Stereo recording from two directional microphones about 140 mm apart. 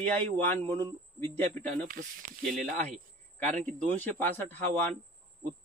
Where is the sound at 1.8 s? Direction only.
80° right.